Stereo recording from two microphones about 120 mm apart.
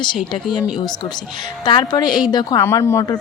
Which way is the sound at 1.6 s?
35° left (ahead or behind).